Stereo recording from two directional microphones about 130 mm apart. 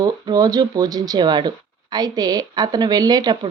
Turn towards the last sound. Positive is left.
turn(degrees=-30)  # may be behind; listen again after turning